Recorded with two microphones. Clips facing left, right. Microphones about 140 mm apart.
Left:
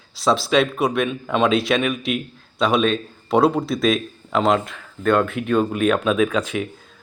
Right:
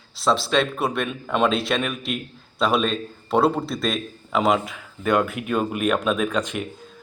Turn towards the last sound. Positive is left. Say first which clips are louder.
# left 4 dB
turn(degrees=0)  # may be behind; listen again after turning